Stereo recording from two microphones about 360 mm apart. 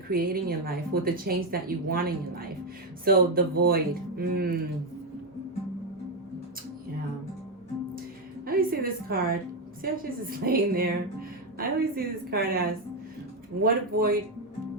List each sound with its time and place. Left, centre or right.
0.1 s a woman's voice: right
8.4 s a woman's voice: right